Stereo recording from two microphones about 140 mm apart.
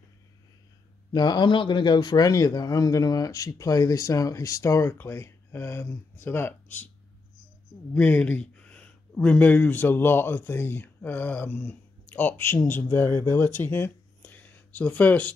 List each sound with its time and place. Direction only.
1.1 s speech: 30° left (ahead or behind)
7.9 s speech: 10° left (ahead or behind)